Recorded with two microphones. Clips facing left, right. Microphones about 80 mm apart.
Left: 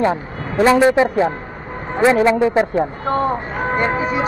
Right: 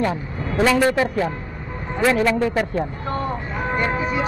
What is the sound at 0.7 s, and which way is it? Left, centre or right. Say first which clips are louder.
Speech: left 6 dB; left.